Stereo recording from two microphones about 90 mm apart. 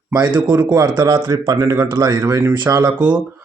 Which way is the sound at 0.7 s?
45° right (ahead or behind).